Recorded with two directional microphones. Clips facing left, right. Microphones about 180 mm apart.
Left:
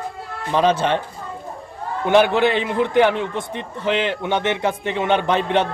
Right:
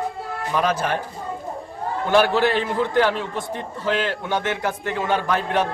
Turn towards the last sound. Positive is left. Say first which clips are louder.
# left 3 dB
turn(degrees=25)  # may be behind; listen again after turning